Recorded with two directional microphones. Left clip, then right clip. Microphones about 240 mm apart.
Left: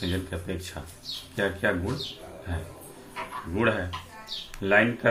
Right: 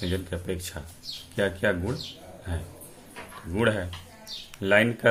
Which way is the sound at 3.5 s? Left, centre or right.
Right.